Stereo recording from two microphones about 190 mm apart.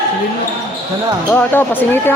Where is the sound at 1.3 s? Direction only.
10° left (ahead or behind).